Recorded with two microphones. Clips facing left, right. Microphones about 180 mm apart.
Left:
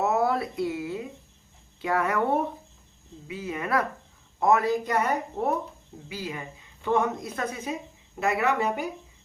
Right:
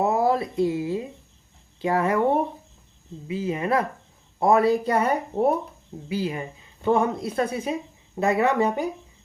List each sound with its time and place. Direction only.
0.0 s a sound: 30° right (ahead or behind)
1.8 s speech: 30° right (ahead or behind)
3.2 s speech: 30° right (ahead or behind)